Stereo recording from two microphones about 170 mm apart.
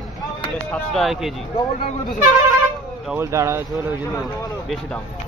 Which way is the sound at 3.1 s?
15° right (ahead or behind).